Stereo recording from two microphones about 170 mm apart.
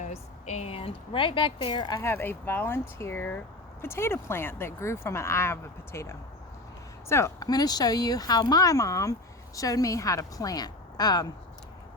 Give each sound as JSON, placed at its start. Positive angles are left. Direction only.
{"t": 0.0, "sound": "speech", "side_deg": 40}
{"t": 2.0, "sound": "speech", "side_deg": 15}